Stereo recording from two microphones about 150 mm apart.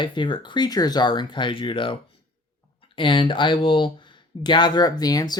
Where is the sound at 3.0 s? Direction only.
35° left (ahead or behind).